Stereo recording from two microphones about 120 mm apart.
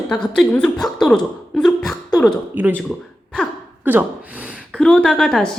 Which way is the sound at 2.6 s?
15° right (ahead or behind).